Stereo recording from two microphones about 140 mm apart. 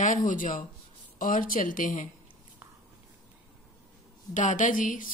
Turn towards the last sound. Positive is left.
turn(degrees=70)  # may be behind; listen again after turning